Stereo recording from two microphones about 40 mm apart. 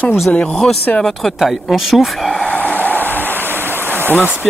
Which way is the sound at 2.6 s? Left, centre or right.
Left.